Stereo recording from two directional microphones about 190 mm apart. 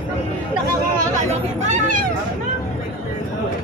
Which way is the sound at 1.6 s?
40° right (ahead or behind).